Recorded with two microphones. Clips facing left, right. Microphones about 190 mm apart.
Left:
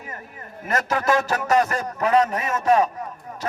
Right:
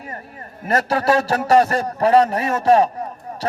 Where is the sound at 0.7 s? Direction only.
35° right (ahead or behind).